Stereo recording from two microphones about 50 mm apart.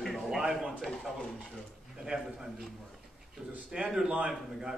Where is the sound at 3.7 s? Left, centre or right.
Centre.